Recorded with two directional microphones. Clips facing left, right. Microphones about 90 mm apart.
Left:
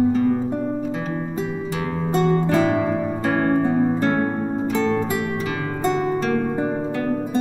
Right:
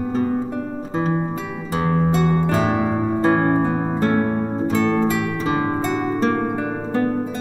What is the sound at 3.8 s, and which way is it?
Music, 40° right (ahead or behind).